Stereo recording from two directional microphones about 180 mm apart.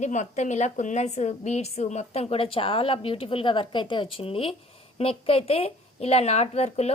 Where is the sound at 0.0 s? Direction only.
40° left (ahead or behind).